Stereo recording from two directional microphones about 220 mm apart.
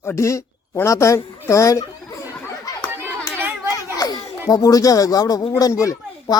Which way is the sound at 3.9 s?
15° left (ahead or behind).